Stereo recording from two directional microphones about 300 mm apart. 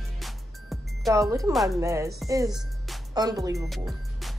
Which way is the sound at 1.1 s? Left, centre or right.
Centre.